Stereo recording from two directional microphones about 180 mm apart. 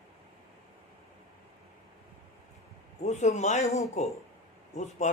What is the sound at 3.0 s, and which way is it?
Speech, 40° left (ahead or behind).